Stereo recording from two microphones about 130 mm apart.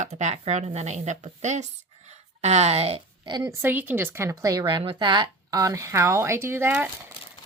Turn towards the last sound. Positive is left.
turn(degrees=-15)  # may be behind; listen again after turning